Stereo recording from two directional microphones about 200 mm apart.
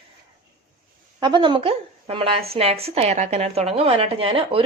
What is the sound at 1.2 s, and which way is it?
A woman's voice, 20° right (ahead or behind).